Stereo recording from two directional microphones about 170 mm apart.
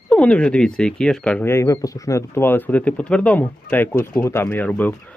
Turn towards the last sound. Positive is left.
turn(degrees=10)  # may be behind; listen again after turning